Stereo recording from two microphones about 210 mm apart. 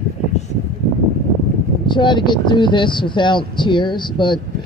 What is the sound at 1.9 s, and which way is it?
A man's voice, 20° left (ahead or behind).